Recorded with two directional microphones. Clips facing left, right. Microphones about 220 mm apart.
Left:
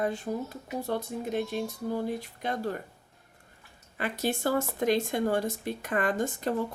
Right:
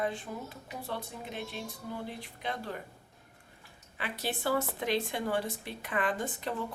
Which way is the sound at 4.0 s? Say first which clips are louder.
Left 6 dB; 45° left (ahead or behind).